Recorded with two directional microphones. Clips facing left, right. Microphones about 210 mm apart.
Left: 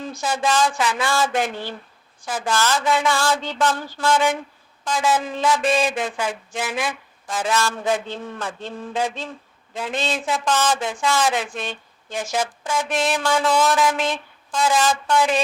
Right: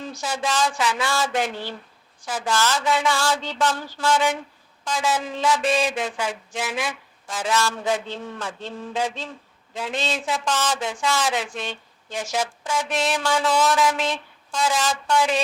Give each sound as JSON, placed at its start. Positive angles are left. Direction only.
{"t": 0.1, "sound": "speech", "side_deg": 55}